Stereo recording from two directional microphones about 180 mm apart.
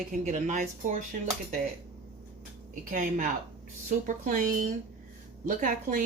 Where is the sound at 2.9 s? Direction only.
45° right (ahead or behind).